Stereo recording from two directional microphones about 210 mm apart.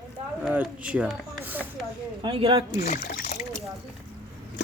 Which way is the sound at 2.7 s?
35° left (ahead or behind).